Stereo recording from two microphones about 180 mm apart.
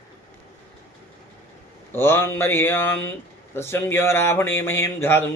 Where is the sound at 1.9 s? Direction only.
10° left (ahead or behind).